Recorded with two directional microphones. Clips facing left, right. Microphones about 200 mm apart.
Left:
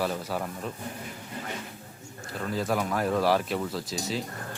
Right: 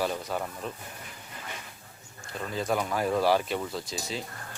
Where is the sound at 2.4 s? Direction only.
Centre (ahead or behind).